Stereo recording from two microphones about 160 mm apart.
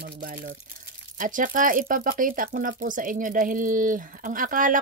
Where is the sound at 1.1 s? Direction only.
55° right (ahead or behind).